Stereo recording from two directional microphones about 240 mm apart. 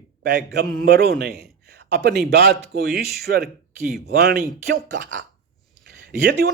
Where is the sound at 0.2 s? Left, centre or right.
Right.